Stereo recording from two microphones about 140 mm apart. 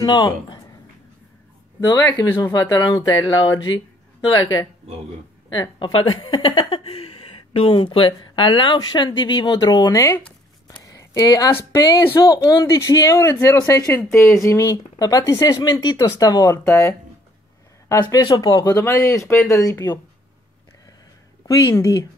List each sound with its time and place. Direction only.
0.0 s a woman's voice: 30° left (ahead or behind)
1.8 s a woman's voice: 30° left (ahead or behind)
10.7 s a sound: 25° left (ahead or behind)
11.7 s speech: 25° left (ahead or behind)
18.1 s speech: 30° left (ahead or behind)
21.5 s speech: 25° left (ahead or behind)